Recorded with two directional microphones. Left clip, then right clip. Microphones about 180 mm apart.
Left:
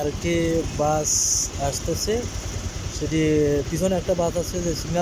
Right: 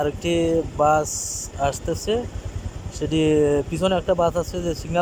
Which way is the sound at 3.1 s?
5° right (ahead or behind).